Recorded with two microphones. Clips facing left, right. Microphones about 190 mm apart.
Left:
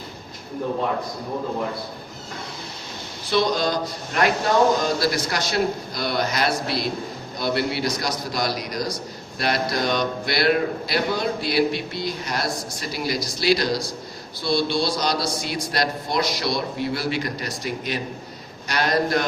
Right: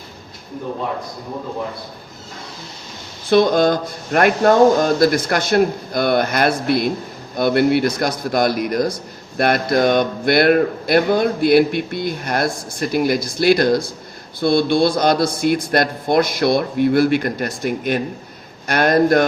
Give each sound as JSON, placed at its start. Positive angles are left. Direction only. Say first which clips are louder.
{"t": 3.2, "sound": "speech", "louder": "right 8 dB", "side_deg": -55}